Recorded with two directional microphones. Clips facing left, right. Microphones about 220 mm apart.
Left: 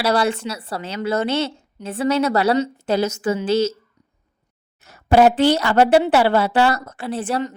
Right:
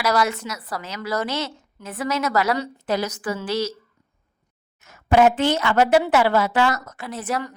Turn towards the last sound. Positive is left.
turn(degrees=30)  # may be behind; listen again after turning